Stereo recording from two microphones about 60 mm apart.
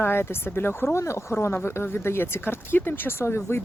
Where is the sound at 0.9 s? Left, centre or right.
Left.